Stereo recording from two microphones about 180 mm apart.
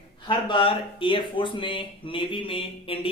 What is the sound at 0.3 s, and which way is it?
Speech, 25° left (ahead or behind).